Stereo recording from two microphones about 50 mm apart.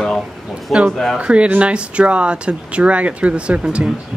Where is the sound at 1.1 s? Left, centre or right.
Right.